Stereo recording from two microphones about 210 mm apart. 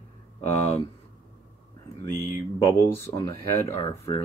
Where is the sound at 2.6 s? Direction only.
15° left (ahead or behind).